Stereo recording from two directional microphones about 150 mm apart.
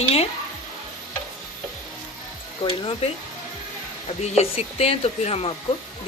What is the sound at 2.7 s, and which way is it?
Speech, 35° left (ahead or behind).